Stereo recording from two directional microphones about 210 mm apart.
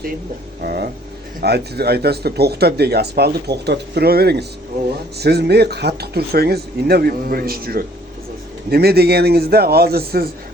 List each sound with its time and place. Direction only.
0.6 s speech: 45° right (ahead or behind)